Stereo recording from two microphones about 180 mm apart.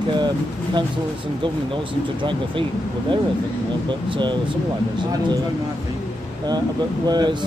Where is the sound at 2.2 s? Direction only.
25° right (ahead or behind).